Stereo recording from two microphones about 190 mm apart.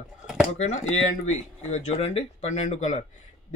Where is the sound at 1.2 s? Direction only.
35° left (ahead or behind).